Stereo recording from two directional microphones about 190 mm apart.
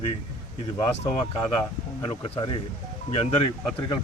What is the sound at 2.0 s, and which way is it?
Speech, 25° left (ahead or behind).